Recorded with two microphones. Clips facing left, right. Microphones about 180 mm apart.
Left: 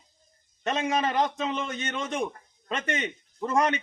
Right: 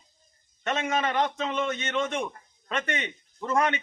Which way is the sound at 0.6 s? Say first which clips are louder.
Left 1 dB; 35° left (ahead or behind).